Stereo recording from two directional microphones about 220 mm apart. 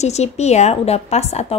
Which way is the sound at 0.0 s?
30° left (ahead or behind).